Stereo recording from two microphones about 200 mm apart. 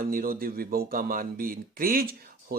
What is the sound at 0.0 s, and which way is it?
Speech, 45° right (ahead or behind).